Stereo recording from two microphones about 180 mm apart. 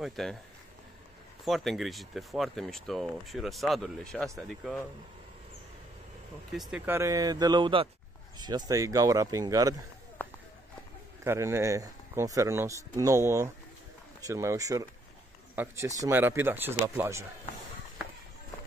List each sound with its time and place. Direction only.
0.0 s speech: centre (ahead or behind)
1.4 s speech: centre (ahead or behind)
6.5 s speech: centre (ahead or behind)
6.9 s speech: 15° right (ahead or behind)
11.2 s speech: 15° right (ahead or behind)